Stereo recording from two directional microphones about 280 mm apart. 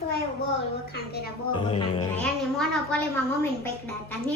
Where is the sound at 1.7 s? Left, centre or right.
Centre.